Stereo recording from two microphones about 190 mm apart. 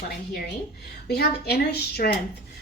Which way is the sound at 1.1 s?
55° left (ahead or behind).